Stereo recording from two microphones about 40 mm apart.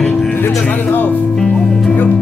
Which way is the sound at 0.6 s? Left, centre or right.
Left.